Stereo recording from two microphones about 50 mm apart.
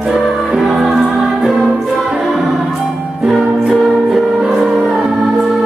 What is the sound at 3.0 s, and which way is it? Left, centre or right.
Music, centre.